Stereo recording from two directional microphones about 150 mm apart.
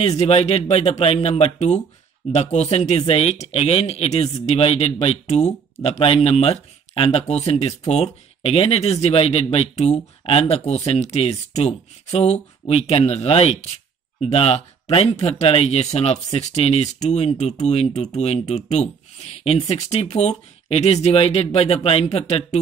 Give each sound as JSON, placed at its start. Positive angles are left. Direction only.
{"t": 0.0, "sound": "speech", "side_deg": 45}